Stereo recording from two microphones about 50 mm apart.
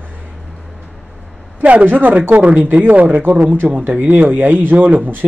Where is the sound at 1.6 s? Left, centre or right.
Right.